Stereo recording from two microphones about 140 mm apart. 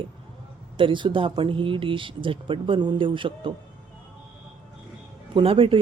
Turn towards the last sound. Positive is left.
turn(degrees=-40)  # may be behind; listen again after turning